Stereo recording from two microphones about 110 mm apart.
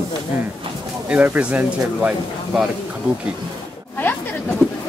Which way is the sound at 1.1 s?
15° right (ahead or behind).